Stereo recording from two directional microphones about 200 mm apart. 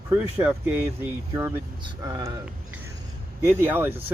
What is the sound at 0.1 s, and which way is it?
Speech, 5° right (ahead or behind).